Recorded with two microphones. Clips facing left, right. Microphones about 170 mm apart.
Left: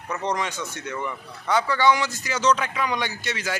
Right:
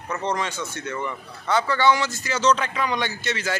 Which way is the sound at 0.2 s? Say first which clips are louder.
Even; 15° left (ahead or behind).